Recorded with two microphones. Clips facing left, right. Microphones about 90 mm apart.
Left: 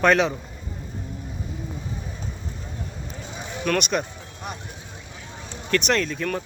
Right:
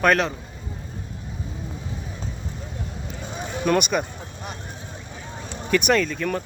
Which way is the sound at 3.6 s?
10° right (ahead or behind).